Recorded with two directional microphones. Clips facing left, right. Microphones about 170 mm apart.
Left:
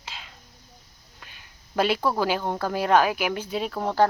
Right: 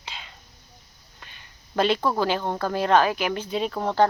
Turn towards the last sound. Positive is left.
turn(degrees=5)  # may be behind; listen again after turning